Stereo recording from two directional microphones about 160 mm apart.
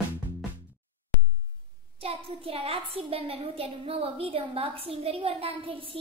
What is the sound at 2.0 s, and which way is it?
A child's voice, 35° right (ahead or behind).